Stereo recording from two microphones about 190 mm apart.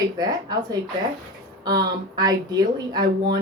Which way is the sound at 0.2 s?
20° right (ahead or behind).